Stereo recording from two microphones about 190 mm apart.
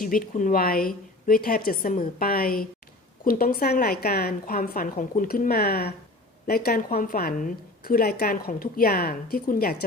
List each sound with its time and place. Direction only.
0.0 s a woman's voice: 45° left (ahead or behind)